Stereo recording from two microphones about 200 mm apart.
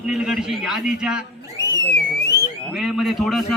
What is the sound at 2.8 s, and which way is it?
Speech, centre (ahead or behind).